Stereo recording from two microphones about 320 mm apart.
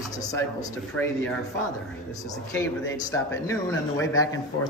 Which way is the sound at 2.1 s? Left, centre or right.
Centre.